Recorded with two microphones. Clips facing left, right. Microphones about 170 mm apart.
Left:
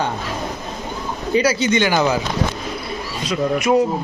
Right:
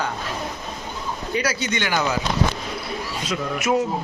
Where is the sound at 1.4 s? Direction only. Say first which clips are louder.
Left 9 dB; 25° left (ahead or behind).